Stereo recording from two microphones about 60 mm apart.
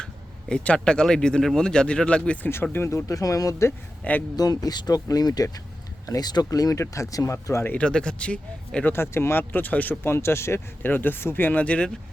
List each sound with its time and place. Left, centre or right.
0.0 s speech: centre
2.9 s speech: left
4.4 s speech: left
7.8 s speech: centre
8.9 s speech: left
9.4 s speech: left
10.0 s speech: left
10.8 s speech: left
11.6 s speech: left